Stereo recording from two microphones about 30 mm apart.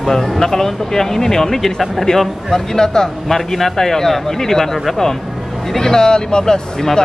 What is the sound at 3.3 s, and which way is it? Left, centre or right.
Speech, centre.